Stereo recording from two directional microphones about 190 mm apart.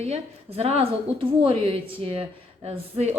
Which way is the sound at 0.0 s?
35° right (ahead or behind).